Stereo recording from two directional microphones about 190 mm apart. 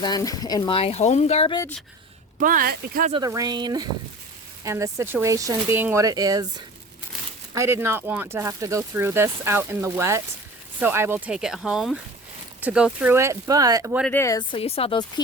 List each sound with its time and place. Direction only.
0.0 s speech: 20° left (ahead or behind)
2.4 s speech: 45° right (ahead or behind)
3.1 s speech: 20° right (ahead or behind)
7.5 s speech: 15° right (ahead or behind)
14.1 s speech: 15° left (ahead or behind)